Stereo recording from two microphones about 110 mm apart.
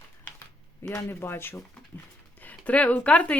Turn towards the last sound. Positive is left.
turn(degrees=10)  # may be behind; listen again after turning